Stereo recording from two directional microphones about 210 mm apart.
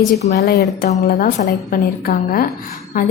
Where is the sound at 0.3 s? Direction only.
45° left (ahead or behind).